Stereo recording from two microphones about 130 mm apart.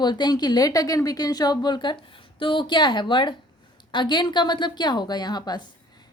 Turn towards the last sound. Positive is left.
turn(degrees=30)  # may be behind; listen again after turning